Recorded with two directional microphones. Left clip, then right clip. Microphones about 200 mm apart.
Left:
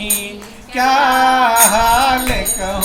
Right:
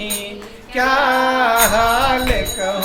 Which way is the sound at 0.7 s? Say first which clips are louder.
Left 3 dB; 15° right (ahead or behind).